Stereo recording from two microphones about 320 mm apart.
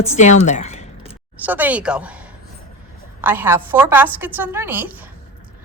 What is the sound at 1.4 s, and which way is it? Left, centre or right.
A woman's voice, centre.